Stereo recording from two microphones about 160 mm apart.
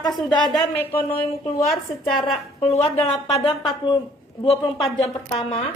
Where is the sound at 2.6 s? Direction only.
40° left (ahead or behind).